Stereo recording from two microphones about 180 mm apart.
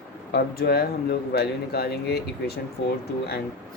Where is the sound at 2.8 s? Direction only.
90° left.